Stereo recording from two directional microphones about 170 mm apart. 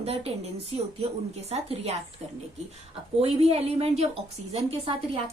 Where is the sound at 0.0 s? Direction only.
35° right (ahead or behind).